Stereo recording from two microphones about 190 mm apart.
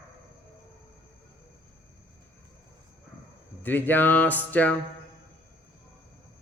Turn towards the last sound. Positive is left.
turn(degrees=10)  # may be behind; listen again after turning